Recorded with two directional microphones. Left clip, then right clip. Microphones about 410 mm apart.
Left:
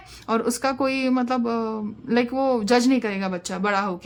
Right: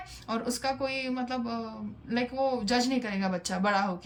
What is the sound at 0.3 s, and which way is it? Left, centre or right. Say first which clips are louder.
A man's voice: left 8 dB; centre.